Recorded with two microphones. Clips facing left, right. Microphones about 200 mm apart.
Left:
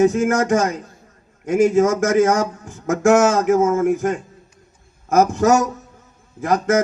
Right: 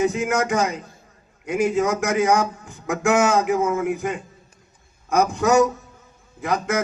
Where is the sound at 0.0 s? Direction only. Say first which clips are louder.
Left 5 dB; 45° left (ahead or behind).